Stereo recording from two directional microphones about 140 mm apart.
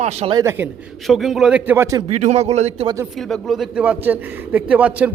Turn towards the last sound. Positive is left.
turn(degrees=-10)  # may be behind; listen again after turning